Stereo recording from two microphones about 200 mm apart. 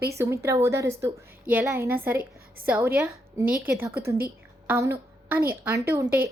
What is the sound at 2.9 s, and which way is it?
A woman's voice, 10° right (ahead or behind).